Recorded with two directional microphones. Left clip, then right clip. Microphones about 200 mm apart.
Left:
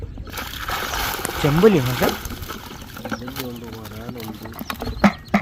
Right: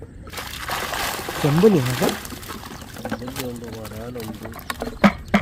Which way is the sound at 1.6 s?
Centre (ahead or behind).